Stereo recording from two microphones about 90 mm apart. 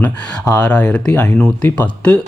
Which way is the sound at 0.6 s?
10° left (ahead or behind).